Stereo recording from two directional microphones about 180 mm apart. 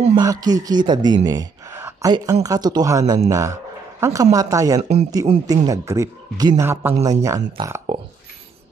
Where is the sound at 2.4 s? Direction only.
20° right (ahead or behind).